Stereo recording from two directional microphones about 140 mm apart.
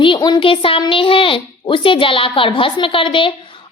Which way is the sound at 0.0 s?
35° left (ahead or behind).